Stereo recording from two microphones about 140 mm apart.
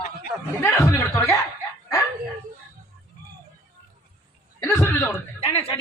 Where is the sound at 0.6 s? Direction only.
15° left (ahead or behind).